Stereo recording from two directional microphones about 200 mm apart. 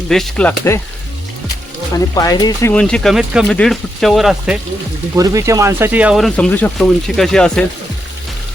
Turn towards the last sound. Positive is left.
turn(degrees=5)  # may be behind; listen again after turning